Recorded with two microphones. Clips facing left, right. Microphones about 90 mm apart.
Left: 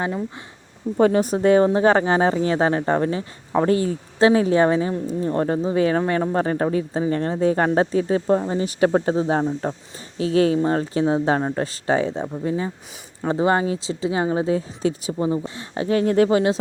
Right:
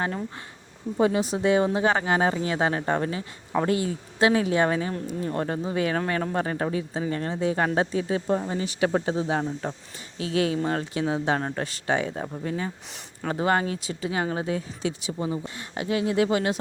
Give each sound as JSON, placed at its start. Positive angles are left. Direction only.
{"t": 0.9, "sound": "speech", "side_deg": 45}
{"t": 16.0, "sound": "speech", "side_deg": 45}